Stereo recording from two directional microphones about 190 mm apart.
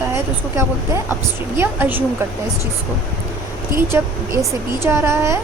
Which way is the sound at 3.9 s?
15° right (ahead or behind).